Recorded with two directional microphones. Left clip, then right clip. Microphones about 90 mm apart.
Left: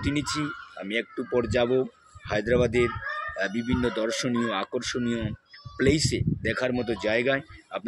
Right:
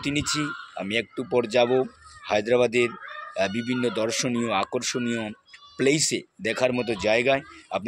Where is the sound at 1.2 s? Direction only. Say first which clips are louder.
Right 4 dB; 45° left (ahead or behind).